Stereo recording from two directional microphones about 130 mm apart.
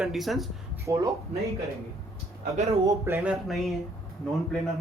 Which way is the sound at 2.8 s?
25° right (ahead or behind).